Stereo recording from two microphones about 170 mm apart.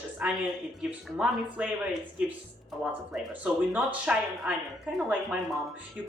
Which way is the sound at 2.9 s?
5° right (ahead or behind).